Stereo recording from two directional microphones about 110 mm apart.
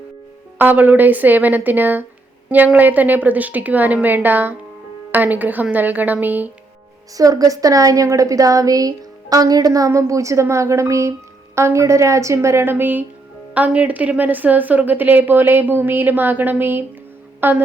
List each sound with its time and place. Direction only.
0.6 s a woman's voice: 15° right (ahead or behind)
7.2 s a woman's voice: 30° right (ahead or behind)